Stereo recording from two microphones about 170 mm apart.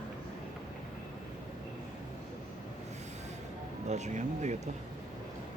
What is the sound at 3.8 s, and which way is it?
Speech, 45° right (ahead or behind).